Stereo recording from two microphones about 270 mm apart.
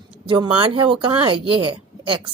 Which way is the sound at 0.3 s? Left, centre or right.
Centre.